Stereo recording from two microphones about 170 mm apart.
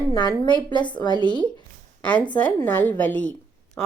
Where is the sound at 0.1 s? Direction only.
25° left (ahead or behind).